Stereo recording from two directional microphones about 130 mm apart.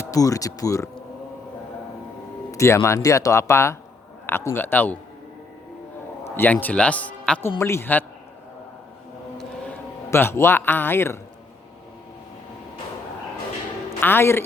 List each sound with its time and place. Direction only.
0.1 s speech: 25° left (ahead or behind)
2.5 s speech: 20° left (ahead or behind)
6.2 s speech: 15° left (ahead or behind)
10.1 s speech: 20° left (ahead or behind)
14.0 s speech: 15° left (ahead or behind)